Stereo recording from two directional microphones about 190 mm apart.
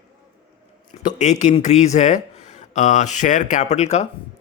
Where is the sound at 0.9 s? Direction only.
30° left (ahead or behind).